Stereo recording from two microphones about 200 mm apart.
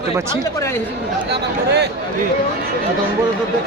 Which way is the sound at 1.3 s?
55° right (ahead or behind).